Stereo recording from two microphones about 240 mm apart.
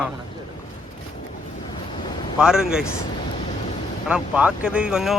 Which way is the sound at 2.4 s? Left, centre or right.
Centre.